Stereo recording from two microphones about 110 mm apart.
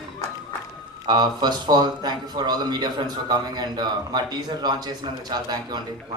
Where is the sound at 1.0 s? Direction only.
40° right (ahead or behind).